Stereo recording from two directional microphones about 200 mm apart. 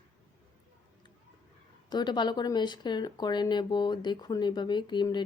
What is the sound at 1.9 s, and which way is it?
Speech, 20° left (ahead or behind).